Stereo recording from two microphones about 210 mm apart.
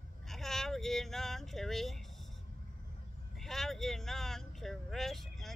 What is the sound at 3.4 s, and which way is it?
Speech, centre (ahead or behind).